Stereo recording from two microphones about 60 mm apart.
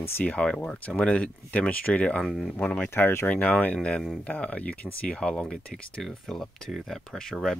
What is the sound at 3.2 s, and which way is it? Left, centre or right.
Speech, left.